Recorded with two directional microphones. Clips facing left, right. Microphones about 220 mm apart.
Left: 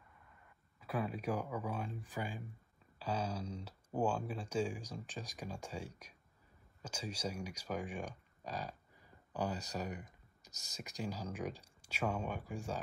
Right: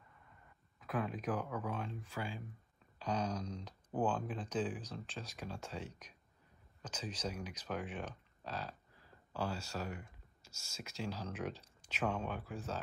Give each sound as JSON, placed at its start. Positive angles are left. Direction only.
{"t": 0.7, "sound": "speech", "side_deg": 10}
{"t": 10.4, "sound": "whispering", "side_deg": 15}
{"t": 10.8, "sound": "speech", "side_deg": 15}